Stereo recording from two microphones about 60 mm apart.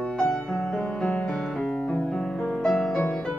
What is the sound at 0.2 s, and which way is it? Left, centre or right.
Music, centre.